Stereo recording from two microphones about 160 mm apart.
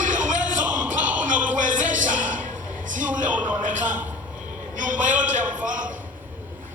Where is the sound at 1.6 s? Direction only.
55° right (ahead or behind).